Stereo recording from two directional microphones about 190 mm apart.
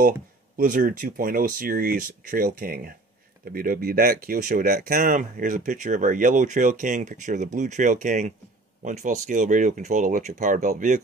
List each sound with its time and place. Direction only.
0.6 s speech: 45° right (ahead or behind)